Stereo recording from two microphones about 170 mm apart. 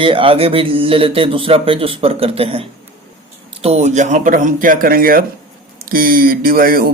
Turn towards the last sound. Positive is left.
turn(degrees=-60)  # may be behind; listen again after turning